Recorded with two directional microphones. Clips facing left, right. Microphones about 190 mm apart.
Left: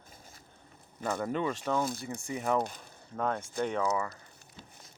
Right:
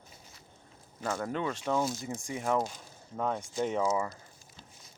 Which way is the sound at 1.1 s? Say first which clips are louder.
Left 2 dB; 5° left (ahead or behind).